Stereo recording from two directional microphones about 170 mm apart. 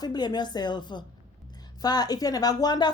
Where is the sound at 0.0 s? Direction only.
25° left (ahead or behind).